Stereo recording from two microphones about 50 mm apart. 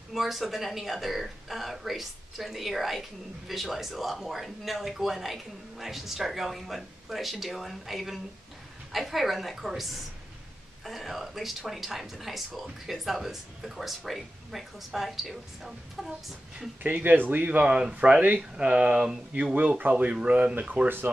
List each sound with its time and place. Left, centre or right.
0.1 s a woman's voice: centre
16.8 s speech: right; by 19.1 s centre
19.8 s speech: right